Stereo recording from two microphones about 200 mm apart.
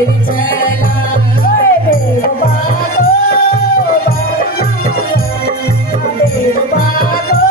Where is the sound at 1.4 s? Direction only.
45° left (ahead or behind).